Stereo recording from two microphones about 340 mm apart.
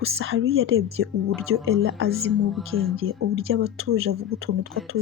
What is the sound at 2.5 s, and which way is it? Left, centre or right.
Speech, centre.